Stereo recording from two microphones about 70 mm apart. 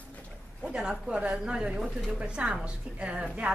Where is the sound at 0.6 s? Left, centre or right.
Centre.